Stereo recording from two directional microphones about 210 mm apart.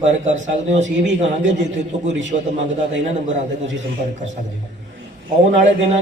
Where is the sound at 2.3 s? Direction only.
35° right (ahead or behind).